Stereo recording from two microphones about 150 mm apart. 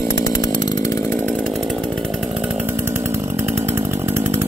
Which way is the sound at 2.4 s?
10° right (ahead or behind).